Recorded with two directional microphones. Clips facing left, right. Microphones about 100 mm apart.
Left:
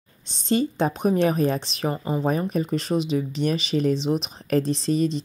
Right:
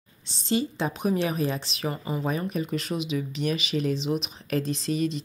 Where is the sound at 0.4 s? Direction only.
40° left (ahead or behind).